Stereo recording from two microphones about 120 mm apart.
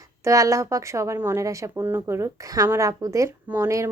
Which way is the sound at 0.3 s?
25° right (ahead or behind).